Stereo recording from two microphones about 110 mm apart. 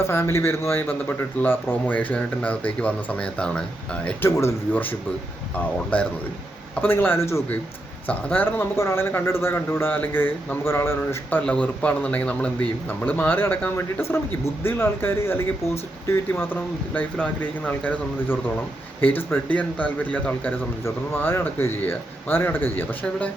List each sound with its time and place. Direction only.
0.1 s a man's voice: 25° left (ahead or behind)
4.0 s a man's voice: 20° left (ahead or behind)